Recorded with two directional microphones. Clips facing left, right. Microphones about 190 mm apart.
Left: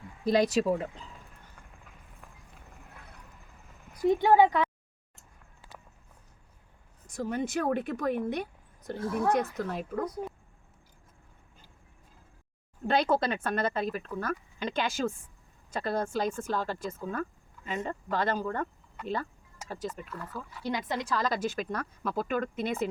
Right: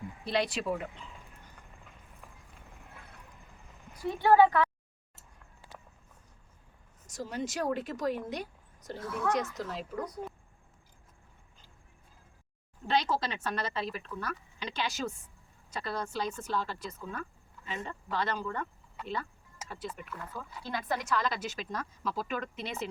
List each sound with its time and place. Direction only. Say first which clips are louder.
0.3 s speech: left 6 dB; 40° left (ahead or behind)
1.6 s vehicle: left 1 dB; 5° right (ahead or behind)
4.1 s speech: left 1 dB; 15° left (ahead or behind)
7.1 s speech: left 5 dB; 55° left (ahead or behind)
9.6 s speech: left 4 dB; 55° left (ahead or behind)
12.9 s speech: left 4 dB; 55° left (ahead or behind)
20.3 s speech: left 2 dB; 5° left (ahead or behind)
20.7 s speech: left 2 dB; 20° left (ahead or behind)
21.1 s speech: left 6 dB; 40° left (ahead or behind)